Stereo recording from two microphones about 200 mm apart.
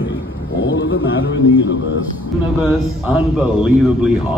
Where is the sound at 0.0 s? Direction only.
70° left (ahead or behind).